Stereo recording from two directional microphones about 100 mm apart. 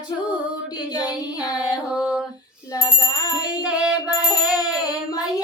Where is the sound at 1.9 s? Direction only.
10° right (ahead or behind).